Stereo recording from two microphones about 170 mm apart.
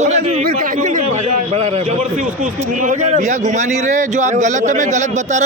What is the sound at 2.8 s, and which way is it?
A man's voice, 45° right (ahead or behind).